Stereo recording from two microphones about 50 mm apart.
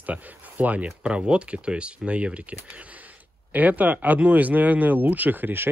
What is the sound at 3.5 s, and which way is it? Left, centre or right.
Speech, right.